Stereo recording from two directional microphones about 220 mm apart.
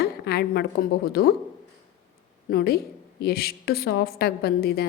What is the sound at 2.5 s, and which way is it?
A woman's voice, 45° left (ahead or behind).